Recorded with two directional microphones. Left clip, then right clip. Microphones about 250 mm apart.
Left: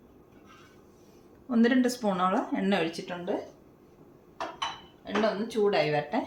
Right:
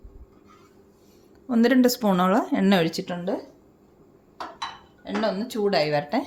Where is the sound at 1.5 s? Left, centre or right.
Right.